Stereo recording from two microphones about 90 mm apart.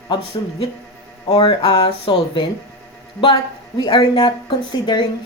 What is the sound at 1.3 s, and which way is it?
Speech, 90° left.